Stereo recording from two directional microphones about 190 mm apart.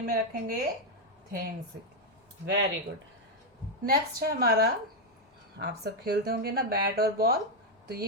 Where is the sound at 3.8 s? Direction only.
50° right (ahead or behind).